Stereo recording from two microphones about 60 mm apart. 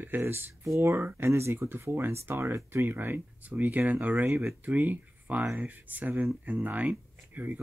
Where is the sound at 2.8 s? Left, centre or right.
Right.